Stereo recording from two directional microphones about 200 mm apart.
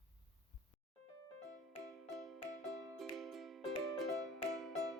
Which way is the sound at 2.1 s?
Centre (ahead or behind).